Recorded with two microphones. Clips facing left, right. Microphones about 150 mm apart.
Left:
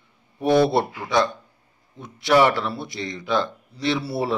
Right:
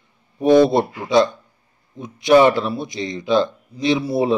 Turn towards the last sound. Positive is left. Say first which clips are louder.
# right 6 dB
turn(degrees=-20)  # may be behind; listen again after turning